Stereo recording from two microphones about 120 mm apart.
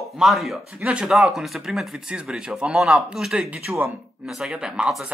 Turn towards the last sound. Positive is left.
turn(degrees=0)  # may be behind; listen again after turning